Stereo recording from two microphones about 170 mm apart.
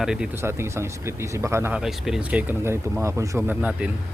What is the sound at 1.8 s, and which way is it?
Speech, centre (ahead or behind).